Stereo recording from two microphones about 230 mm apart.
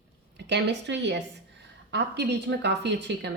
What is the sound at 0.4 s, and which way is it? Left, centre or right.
A woman's voice, right.